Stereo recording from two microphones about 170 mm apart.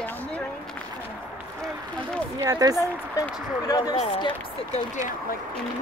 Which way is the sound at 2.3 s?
20° right (ahead or behind).